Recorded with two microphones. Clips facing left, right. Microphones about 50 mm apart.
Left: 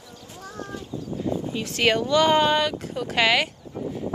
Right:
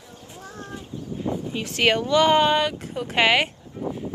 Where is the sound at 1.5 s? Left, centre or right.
Right.